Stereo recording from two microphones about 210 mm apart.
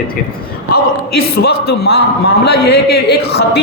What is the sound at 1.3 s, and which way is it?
A man's voice, 50° left (ahead or behind).